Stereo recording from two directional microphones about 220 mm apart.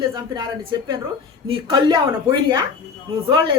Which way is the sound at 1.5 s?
20° right (ahead or behind).